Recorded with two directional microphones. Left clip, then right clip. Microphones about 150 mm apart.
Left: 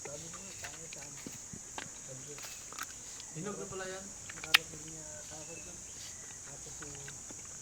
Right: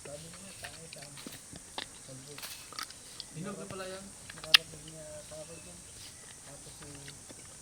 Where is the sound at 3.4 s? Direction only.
5° left (ahead or behind).